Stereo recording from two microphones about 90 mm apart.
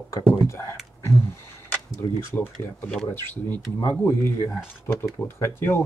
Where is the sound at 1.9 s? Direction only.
20° left (ahead or behind).